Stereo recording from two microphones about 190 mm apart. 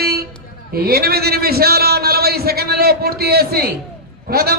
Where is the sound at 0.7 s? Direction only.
50° right (ahead or behind).